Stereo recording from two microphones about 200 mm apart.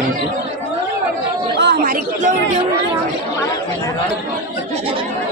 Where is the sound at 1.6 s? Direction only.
50° right (ahead or behind).